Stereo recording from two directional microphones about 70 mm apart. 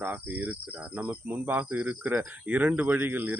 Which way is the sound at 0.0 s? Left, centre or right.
Right.